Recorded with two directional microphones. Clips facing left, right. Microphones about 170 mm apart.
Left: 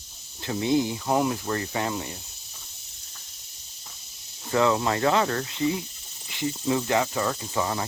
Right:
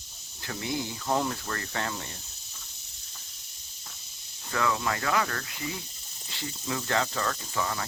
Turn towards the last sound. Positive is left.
turn(degrees=25)  # may be behind; listen again after turning